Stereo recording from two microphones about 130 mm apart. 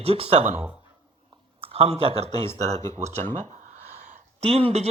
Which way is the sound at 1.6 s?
50° right (ahead or behind).